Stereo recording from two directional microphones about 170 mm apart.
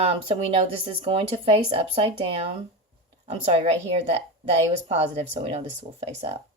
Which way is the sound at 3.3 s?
35° right (ahead or behind).